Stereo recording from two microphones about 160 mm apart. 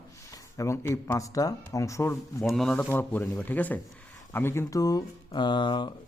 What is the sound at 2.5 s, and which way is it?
Speech, 5° left (ahead or behind).